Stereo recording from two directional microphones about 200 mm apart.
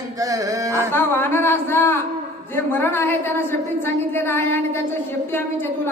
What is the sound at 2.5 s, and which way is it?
A woman's voice, 10° left (ahead or behind).